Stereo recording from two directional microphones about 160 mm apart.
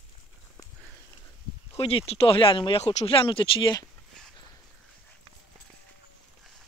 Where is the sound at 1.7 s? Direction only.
35° left (ahead or behind).